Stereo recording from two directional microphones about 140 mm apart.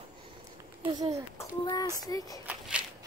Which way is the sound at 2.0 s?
25° left (ahead or behind).